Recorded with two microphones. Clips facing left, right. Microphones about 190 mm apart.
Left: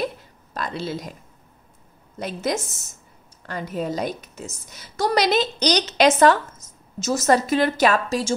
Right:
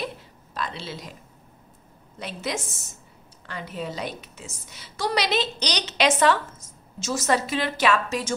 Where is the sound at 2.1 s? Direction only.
45° left (ahead or behind).